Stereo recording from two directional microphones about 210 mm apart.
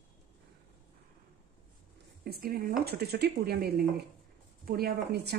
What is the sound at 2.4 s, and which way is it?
Speech, 45° right (ahead or behind).